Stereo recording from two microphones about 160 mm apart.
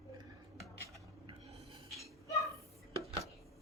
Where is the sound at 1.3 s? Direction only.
30° right (ahead or behind).